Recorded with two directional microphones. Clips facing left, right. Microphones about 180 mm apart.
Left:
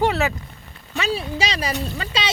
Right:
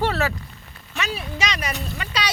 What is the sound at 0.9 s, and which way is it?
Speech, 30° left (ahead or behind).